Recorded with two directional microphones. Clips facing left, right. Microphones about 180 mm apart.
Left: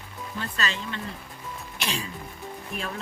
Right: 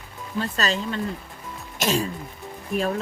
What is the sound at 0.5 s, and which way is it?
Speech, 40° right (ahead or behind).